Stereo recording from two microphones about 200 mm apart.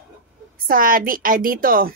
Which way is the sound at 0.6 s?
45° right (ahead or behind).